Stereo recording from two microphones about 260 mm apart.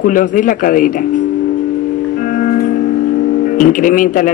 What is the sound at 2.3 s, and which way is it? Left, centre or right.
Music, left.